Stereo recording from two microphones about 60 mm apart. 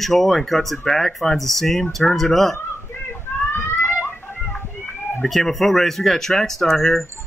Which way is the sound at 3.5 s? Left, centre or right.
Left.